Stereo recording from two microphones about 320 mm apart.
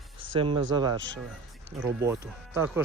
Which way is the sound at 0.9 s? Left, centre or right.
Right.